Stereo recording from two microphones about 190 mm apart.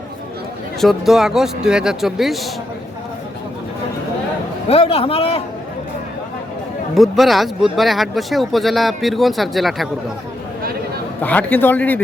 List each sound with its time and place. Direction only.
0.8 s speech: centre (ahead or behind)
4.7 s a man's voice: 30° left (ahead or behind)
6.9 s speech: centre (ahead or behind)
11.2 s speech: 10° left (ahead or behind)